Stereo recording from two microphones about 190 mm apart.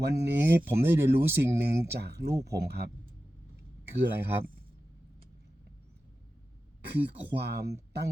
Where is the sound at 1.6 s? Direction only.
60° right (ahead or behind).